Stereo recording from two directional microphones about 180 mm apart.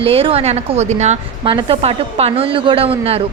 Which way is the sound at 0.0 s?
30° right (ahead or behind).